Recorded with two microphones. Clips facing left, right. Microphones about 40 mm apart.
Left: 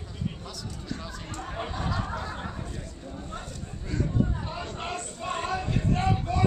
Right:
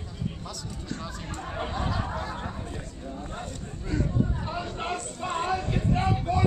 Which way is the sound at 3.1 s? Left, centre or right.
Centre.